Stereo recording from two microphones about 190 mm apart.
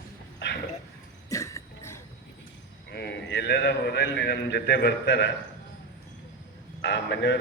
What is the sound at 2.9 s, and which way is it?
A man's voice, 65° left (ahead or behind).